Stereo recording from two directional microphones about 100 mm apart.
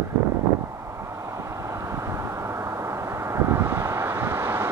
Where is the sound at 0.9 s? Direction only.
30° right (ahead or behind).